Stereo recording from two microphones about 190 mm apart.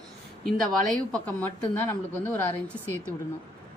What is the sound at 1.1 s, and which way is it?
Speech, 10° left (ahead or behind).